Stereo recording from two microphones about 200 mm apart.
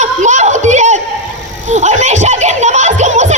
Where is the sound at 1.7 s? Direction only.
35° right (ahead or behind).